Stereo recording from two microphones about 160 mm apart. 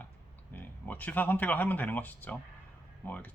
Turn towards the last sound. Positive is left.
turn(degrees=10)  # may be behind; listen again after turning